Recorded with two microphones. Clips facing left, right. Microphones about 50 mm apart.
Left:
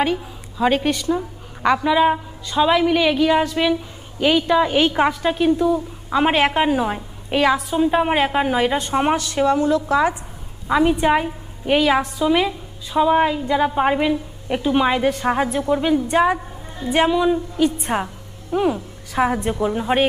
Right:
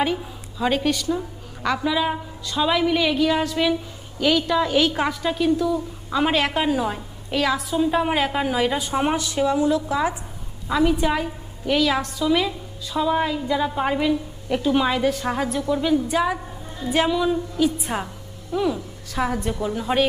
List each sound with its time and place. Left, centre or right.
0.0 s a woman's voice: centre
0.6 s a woman's voice: centre
9.5 s a woman's voice: left
10.7 s a woman's voice: left